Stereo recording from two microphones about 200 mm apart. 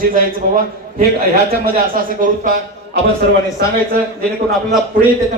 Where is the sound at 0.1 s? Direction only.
45° right (ahead or behind).